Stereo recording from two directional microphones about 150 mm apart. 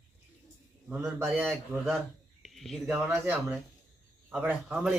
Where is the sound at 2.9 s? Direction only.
15° right (ahead or behind).